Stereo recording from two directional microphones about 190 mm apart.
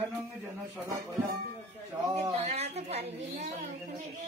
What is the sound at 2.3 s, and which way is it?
A woman's voice, 35° right (ahead or behind).